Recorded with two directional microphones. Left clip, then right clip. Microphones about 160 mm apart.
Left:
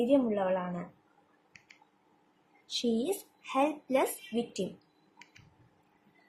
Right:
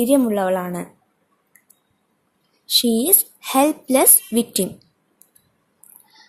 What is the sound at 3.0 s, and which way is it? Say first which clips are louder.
A woman's voice: right 12 dB; 55° right (ahead or behind).